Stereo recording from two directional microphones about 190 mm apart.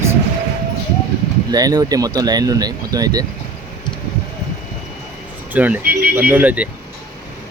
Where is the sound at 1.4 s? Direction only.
20° right (ahead or behind).